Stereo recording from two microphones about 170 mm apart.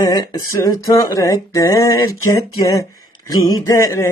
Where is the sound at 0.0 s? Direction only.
20° left (ahead or behind).